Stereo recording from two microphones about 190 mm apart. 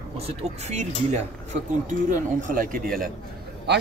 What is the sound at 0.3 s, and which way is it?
Speech, 35° right (ahead or behind).